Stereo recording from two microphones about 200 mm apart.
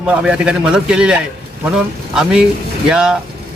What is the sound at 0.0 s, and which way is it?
Speech, 5° right (ahead or behind).